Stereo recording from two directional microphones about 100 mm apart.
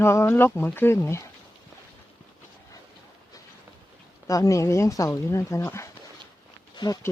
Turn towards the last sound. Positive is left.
turn(degrees=40)  # may be behind; listen again after turning